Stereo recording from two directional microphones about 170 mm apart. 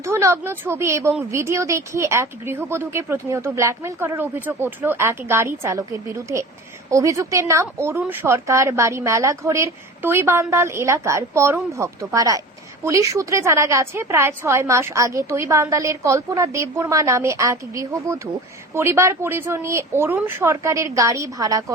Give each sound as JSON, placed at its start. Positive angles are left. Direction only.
{"t": 0.0, "sound": "speech", "side_deg": -15}